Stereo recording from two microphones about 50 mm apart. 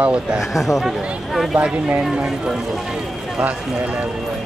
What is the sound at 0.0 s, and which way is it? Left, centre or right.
Speech, right.